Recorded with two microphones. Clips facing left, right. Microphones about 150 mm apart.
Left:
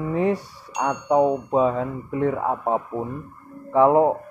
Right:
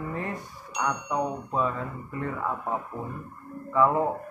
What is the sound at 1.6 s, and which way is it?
Speech, 90° left.